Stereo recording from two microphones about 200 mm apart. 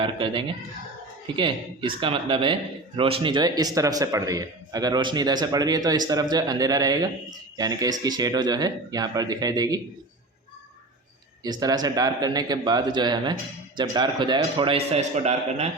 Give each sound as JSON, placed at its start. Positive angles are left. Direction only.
{"t": 0.0, "sound": "speech", "side_deg": -25}
{"t": 11.4, "sound": "speech", "side_deg": -20}